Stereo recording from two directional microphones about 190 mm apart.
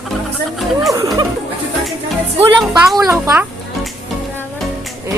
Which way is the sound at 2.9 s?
20° right (ahead or behind).